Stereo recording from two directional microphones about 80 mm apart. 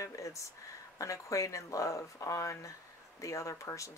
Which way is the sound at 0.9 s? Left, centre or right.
Left.